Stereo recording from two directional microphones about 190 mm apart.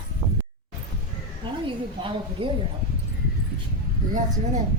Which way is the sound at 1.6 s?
25° right (ahead or behind).